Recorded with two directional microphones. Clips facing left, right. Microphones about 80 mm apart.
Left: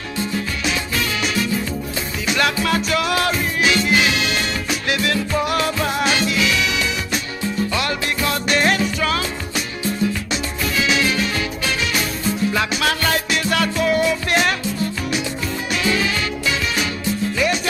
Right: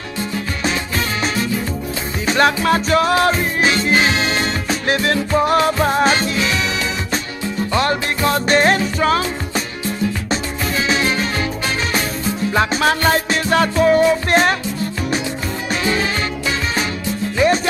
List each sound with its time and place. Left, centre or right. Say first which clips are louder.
2.2 s music: right 5 dB; right